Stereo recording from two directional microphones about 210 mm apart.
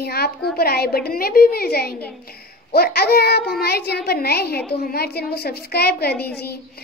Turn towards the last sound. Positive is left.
turn(degrees=50)  # may be behind; listen again after turning